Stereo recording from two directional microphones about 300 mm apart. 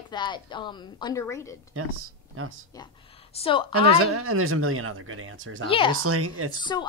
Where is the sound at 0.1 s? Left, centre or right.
Centre.